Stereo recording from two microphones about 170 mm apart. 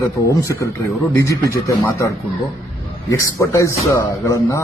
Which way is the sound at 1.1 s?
20° left (ahead or behind).